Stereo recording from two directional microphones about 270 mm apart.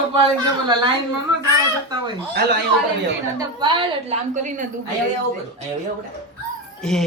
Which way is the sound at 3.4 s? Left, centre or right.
Centre.